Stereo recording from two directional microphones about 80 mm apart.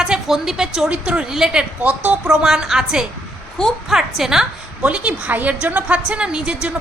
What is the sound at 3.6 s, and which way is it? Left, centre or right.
Speech, centre.